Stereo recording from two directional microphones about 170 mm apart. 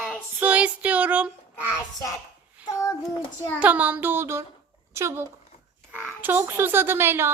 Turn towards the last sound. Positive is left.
turn(degrees=-15)  # may be behind; listen again after turning